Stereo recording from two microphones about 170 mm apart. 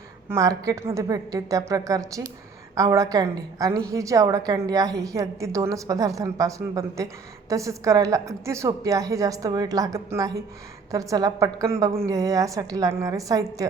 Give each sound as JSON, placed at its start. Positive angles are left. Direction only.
{"t": 0.3, "sound": "a woman's voice", "side_deg": -20}